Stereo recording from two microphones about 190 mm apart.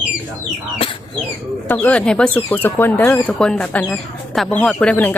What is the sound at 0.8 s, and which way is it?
Speech, 30° left (ahead or behind).